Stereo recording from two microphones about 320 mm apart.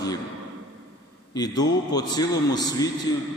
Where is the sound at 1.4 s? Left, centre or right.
Centre.